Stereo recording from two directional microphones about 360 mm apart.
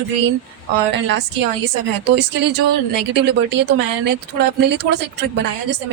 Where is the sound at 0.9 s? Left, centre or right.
Right.